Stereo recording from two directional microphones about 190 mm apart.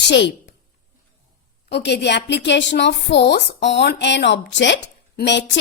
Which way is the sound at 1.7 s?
65° left (ahead or behind).